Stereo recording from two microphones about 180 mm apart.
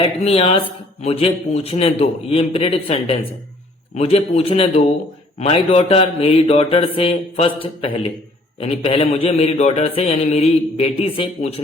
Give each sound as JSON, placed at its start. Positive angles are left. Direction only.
{"t": 0.0, "sound": "a man's voice", "side_deg": 30}